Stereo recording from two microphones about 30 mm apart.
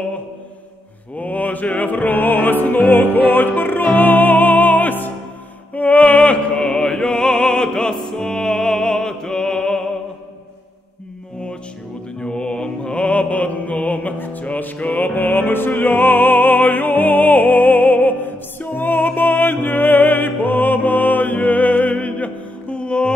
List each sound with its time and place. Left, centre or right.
1.1 s music: left
5.8 s a sound: left
6.8 s opera: left
8.3 s music: left
12.2 s music: left
14.6 s music: left
21.8 s music: left